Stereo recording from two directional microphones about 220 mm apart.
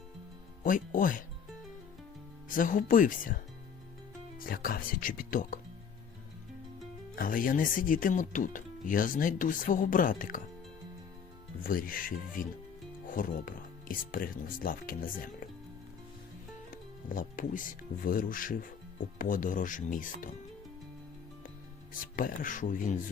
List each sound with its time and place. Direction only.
0.6 s speech: 40° left (ahead or behind)
2.5 s speech: 35° left (ahead or behind)
4.4 s speech: 40° left (ahead or behind)
7.2 s speech: 40° left (ahead or behind)
11.6 s speech: 40° left (ahead or behind)
17.2 s speech: 35° left (ahead or behind)
22.1 s speech: 40° left (ahead or behind)